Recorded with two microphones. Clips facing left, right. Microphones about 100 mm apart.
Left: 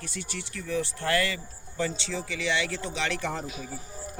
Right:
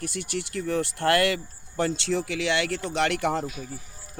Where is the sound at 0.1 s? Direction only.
60° right (ahead or behind).